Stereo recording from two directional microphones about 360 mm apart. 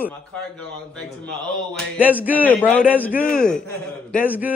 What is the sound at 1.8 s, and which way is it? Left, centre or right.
A man's voice, centre.